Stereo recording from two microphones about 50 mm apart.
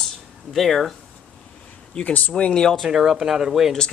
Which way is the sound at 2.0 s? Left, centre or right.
Left.